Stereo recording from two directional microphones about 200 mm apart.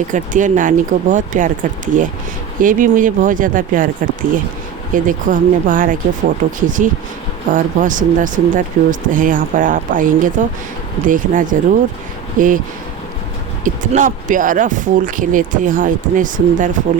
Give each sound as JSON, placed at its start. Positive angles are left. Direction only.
{"t": 0.1, "sound": "speech", "side_deg": -40}
{"t": 13.9, "sound": "speech", "side_deg": -40}